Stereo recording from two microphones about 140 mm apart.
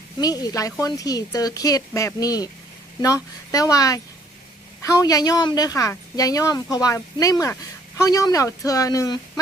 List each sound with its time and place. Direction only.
0.2 s speech: 25° left (ahead or behind)